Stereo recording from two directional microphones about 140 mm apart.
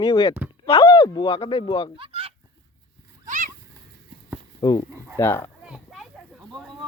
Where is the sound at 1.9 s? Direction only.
40° right (ahead or behind).